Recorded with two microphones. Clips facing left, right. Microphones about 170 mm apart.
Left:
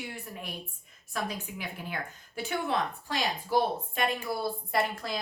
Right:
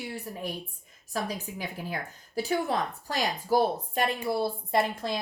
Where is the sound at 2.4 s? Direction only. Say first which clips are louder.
Right 3 dB; 40° right (ahead or behind).